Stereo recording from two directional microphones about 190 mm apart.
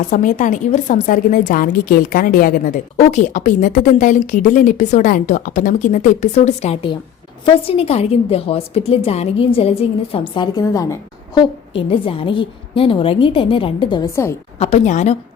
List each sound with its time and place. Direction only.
0.1 s a woman's voice: 40° left (ahead or behind); by 10.9 s 15° left (ahead or behind)
11.3 s a woman's voice: 30° left (ahead or behind)
14.6 s a woman's voice: 35° left (ahead or behind)